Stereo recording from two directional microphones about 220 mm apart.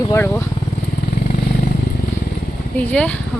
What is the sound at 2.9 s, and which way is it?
Speech, 5° left (ahead or behind).